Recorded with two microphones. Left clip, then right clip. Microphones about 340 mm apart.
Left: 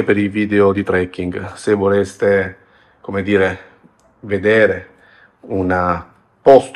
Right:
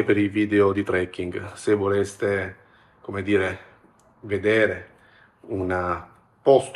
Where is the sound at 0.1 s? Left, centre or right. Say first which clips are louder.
Left 5 dB; left.